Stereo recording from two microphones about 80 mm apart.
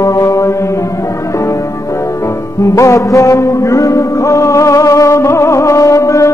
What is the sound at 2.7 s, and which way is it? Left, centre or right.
Music, left.